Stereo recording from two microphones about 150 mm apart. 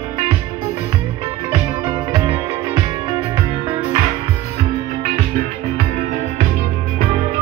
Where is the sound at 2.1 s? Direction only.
30° right (ahead or behind).